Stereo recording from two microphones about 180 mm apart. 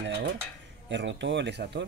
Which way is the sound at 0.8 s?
85° right.